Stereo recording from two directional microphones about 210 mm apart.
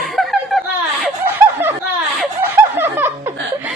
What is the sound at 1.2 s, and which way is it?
Snicker, 10° right (ahead or behind).